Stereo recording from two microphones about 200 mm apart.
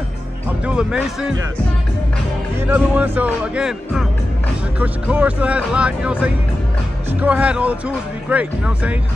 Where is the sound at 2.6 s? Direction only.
10° right (ahead or behind).